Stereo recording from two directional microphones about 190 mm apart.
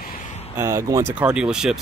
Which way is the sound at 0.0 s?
45° left (ahead or behind).